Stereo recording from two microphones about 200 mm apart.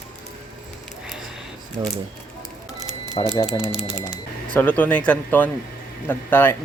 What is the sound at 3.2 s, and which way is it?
Speech, 25° left (ahead or behind).